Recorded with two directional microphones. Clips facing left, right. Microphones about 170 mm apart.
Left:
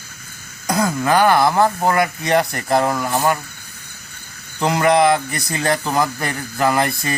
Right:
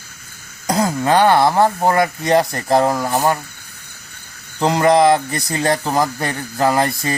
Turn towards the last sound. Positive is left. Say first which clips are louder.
# right 1 dB
turn(degrees=-30)  # may be behind; listen again after turning